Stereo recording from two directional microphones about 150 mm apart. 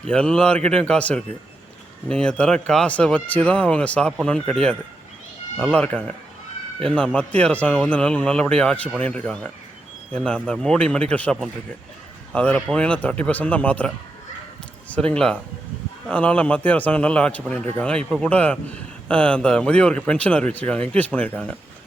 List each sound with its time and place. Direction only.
0.1 s a man's voice: 5° left (ahead or behind)
5.5 s a man's voice: 5° left (ahead or behind)